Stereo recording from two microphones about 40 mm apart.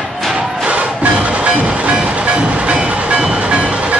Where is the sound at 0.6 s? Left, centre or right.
Right.